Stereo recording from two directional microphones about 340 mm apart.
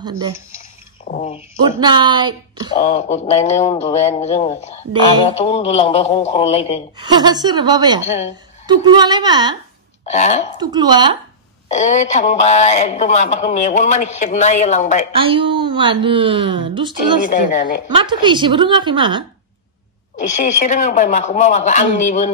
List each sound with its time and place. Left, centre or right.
0.0 s a woman's voice: centre
1.0 s speech: left
1.6 s a woman's voice: centre
2.7 s a man's voice: centre
7.0 s a woman's voice: centre
10.0 s a man's voice: centre
10.6 s a woman's voice: centre
11.7 s a man's voice: left
15.1 s a woman's voice: centre
17.3 s a man's voice: left
17.8 s a woman's voice: centre
20.2 s a man's voice: left